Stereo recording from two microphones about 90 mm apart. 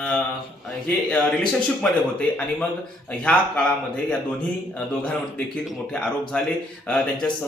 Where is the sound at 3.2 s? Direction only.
10° left (ahead or behind).